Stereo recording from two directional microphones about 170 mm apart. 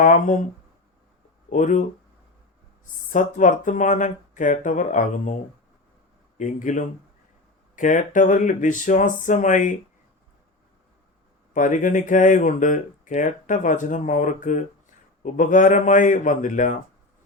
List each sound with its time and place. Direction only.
0.0 s speech: 50° left (ahead or behind)
1.5 s speech: 50° left (ahead or behind)
3.1 s speech: 50° left (ahead or behind)
11.5 s speech: 50° left (ahead or behind)